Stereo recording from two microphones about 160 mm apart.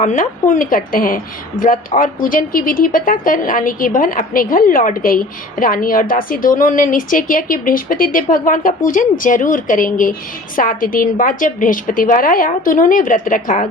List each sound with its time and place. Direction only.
0.0 s a woman's voice: 55° left (ahead or behind)